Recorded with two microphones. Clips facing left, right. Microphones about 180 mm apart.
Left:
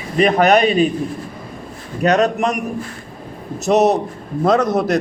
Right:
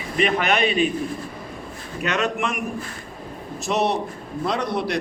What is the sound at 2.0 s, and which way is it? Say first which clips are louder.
Speech: left 9 dB; 40° left (ahead or behind).